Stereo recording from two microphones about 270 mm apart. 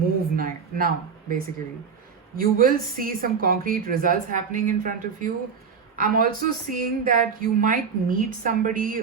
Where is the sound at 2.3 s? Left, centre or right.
Right.